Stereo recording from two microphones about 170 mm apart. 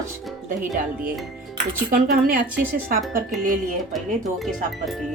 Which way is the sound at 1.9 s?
55° right (ahead or behind).